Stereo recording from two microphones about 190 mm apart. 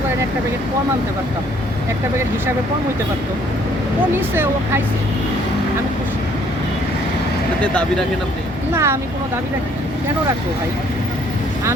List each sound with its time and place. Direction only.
4.1 s speech: 10° right (ahead or behind)
8.7 s speech: 15° right (ahead or behind)